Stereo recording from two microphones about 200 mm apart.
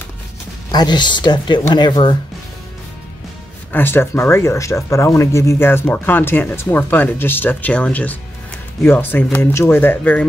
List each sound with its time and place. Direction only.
0.7 s speech: 20° left (ahead or behind)
3.7 s speech: 10° left (ahead or behind)